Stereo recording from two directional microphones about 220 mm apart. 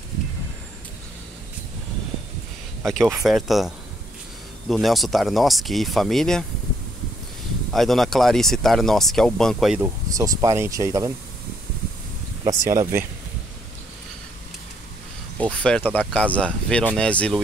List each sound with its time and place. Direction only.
2.8 s speech: centre (ahead or behind)
7.7 s speech: centre (ahead or behind)
10.0 s speech: 15° right (ahead or behind)
12.4 s speech: 15° right (ahead or behind)
15.3 s speech: 5° left (ahead or behind)